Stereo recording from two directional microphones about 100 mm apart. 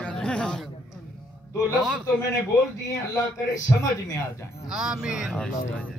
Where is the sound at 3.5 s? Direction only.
35° left (ahead or behind).